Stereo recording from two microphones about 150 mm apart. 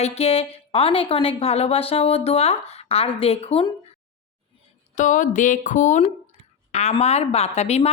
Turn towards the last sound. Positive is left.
turn(degrees=45)  # may be behind; listen again after turning